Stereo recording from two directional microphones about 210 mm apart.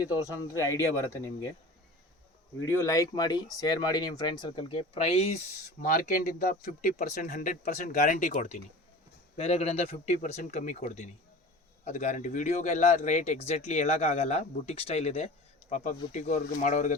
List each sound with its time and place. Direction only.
0.3 s speech: 15° left (ahead or behind)
2.6 s speech: 15° left (ahead or behind); by 5.4 s 30° left (ahead or behind)
5.8 s speech: 40° left (ahead or behind)